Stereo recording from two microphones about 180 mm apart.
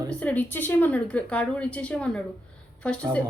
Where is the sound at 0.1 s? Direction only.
10° left (ahead or behind).